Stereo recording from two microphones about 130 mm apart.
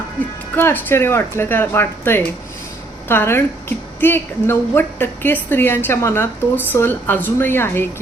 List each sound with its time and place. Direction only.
0.5 s a woman's voice: 15° left (ahead or behind)